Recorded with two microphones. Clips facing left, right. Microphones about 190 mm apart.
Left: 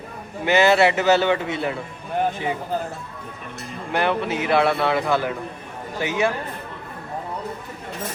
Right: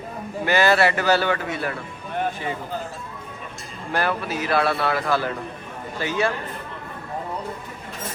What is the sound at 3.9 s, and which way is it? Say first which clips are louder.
A man's voice: left 2 dB; 20° left (ahead or behind).